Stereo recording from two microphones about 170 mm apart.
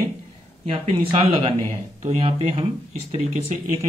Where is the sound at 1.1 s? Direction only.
35° right (ahead or behind).